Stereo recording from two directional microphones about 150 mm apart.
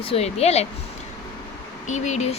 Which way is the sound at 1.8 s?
50° left (ahead or behind).